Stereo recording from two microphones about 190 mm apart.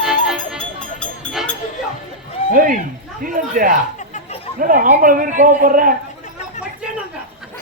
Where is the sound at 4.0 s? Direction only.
40° left (ahead or behind).